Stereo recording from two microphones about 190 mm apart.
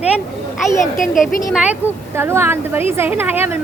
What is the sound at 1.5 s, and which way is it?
Speech, 5° right (ahead or behind).